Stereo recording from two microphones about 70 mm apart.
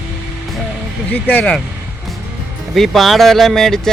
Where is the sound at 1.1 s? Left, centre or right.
Left.